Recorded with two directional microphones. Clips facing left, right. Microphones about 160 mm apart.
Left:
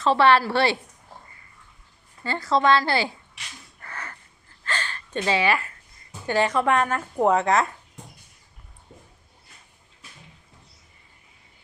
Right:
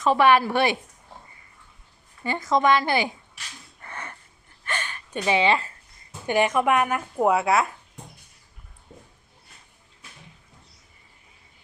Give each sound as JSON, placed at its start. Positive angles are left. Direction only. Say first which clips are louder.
{"t": 0.0, "sound": "speech", "louder": "even", "side_deg": -15}
{"t": 2.2, "sound": "speech", "louder": "even", "side_deg": -15}
{"t": 3.8, "sound": "gasp", "louder": "right 1 dB", "side_deg": -20}
{"t": 6.2, "sound": "speech", "louder": "right 1 dB", "side_deg": -15}